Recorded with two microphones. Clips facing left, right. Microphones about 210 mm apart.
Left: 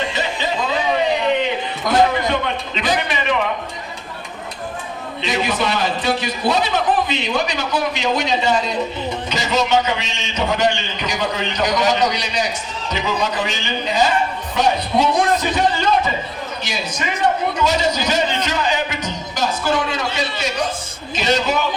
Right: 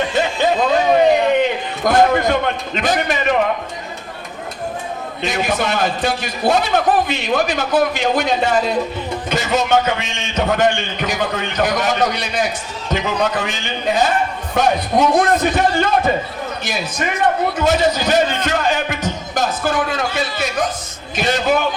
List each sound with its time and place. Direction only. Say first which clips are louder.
0.1 s a sound: right 6 dB; 50° right (ahead or behind)
5.2 s a man's voice: right 1 dB; 50° right (ahead or behind)
17.6 s music: right 4 dB; 55° right (ahead or behind)
21.2 s a man's voice: right 2 dB; 55° right (ahead or behind)